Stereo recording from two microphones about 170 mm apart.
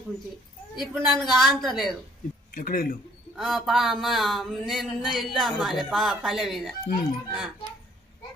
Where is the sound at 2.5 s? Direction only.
60° left (ahead or behind).